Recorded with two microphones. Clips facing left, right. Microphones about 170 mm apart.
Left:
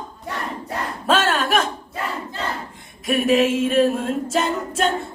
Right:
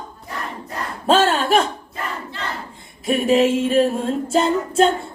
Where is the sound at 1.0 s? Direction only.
30° right (ahead or behind).